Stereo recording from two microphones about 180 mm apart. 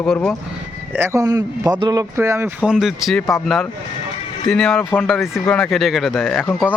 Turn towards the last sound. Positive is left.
turn(degrees=0)  # may be behind; listen again after turning